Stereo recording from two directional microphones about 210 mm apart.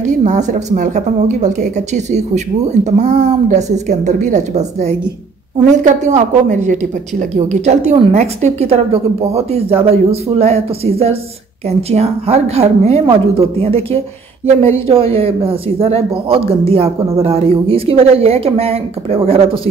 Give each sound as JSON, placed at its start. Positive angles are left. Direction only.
{"t": 0.2, "sound": "a woman's voice", "side_deg": -35}
{"t": 14.9, "sound": "speech", "side_deg": -25}